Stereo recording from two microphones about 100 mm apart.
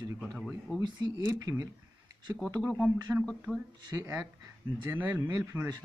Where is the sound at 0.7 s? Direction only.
45° right (ahead or behind).